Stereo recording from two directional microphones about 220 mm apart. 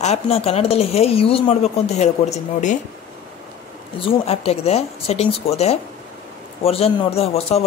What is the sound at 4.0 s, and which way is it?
Speech, 25° left (ahead or behind).